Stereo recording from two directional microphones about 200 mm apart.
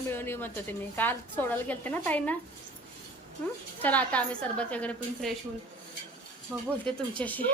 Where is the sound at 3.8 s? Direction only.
10° left (ahead or behind).